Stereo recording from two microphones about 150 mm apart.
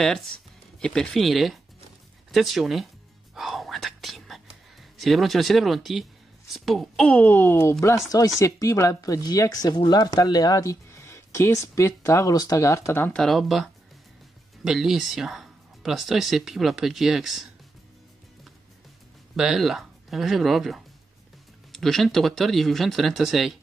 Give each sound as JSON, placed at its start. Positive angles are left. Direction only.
{"t": 0.0, "sound": "speech", "side_deg": 0}
{"t": 3.3, "sound": "whispering", "side_deg": 0}
{"t": 4.9, "sound": "speech", "side_deg": 0}
{"t": 13.2, "sound": "speech", "side_deg": 0}
{"t": 19.3, "sound": "speech", "side_deg": 0}